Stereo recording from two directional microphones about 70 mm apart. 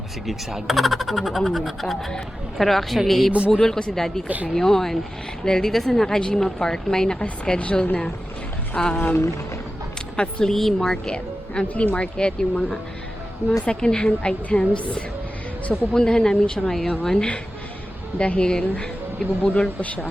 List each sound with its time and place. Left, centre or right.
0.3 s speech: centre
9.0 s speech: left
10.2 s speech: centre